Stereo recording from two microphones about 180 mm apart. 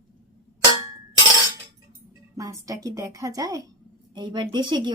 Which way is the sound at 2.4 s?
20° right (ahead or behind).